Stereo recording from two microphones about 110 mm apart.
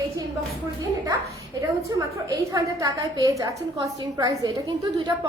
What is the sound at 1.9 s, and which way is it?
A woman's voice, 30° right (ahead or behind).